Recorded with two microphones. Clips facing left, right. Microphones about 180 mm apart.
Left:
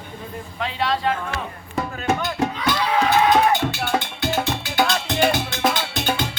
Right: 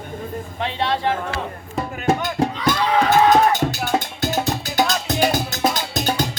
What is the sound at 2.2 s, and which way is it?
Music, 45° right (ahead or behind).